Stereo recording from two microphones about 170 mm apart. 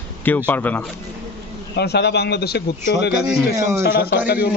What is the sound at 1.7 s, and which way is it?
Speech, 75° left (ahead or behind).